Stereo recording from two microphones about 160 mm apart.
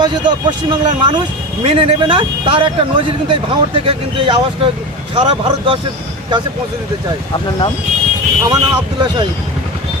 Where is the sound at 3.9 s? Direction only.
35° right (ahead or behind).